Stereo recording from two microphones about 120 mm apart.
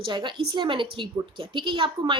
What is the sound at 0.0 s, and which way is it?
A woman's voice, 40° right (ahead or behind).